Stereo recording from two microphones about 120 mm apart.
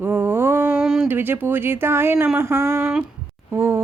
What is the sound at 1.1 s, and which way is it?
Speech, 15° right (ahead or behind).